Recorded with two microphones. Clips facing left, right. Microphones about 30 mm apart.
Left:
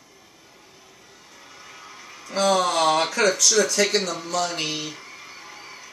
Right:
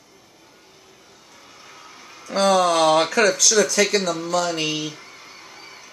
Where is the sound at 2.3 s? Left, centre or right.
Right.